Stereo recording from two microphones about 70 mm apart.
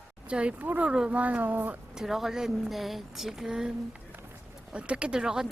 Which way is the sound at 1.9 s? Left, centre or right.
Centre.